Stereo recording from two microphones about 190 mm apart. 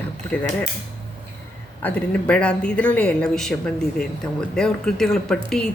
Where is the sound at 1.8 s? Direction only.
5° left (ahead or behind).